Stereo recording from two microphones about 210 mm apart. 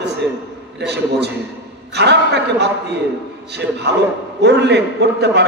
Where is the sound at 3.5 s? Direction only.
55° right (ahead or behind).